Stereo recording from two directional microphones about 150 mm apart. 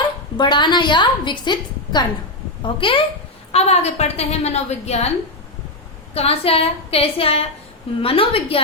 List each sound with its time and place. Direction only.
0.3 s a woman's voice: 30° left (ahead or behind)
3.5 s a woman's voice: 45° left (ahead or behind)
6.1 s a woman's voice: 40° left (ahead or behind)